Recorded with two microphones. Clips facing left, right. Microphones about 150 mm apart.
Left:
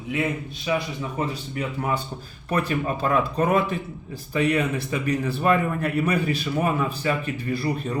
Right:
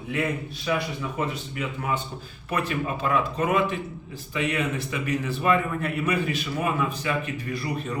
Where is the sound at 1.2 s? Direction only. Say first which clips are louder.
Left 2 dB; 35° left (ahead or behind).